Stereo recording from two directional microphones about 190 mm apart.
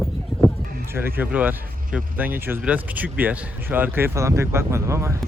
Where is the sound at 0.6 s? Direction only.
50° right (ahead or behind).